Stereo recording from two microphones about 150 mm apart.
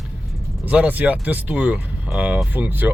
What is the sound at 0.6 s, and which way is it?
Speech, 10° right (ahead or behind).